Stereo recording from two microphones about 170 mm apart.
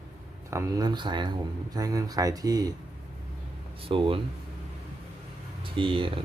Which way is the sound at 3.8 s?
30° right (ahead or behind).